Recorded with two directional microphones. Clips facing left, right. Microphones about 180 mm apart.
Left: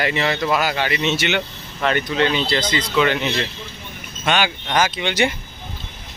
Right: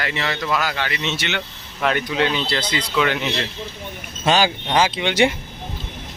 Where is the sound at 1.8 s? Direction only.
5° right (ahead or behind).